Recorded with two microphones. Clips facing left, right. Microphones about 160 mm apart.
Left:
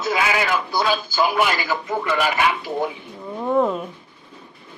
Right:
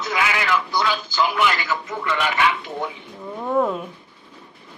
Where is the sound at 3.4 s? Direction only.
Centre (ahead or behind).